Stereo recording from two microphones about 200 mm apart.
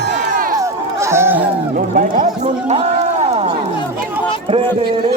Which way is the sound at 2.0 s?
40° right (ahead or behind).